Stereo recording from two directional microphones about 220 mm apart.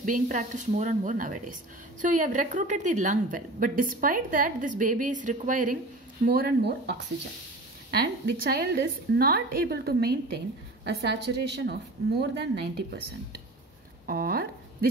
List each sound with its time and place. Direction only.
0.0 s a woman's voice: 35° right (ahead or behind)
8.5 s a woman's voice: 45° right (ahead or behind)
14.0 s a woman's voice: 40° right (ahead or behind)